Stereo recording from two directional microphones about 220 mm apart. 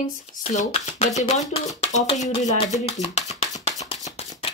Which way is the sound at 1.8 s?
30° left (ahead or behind).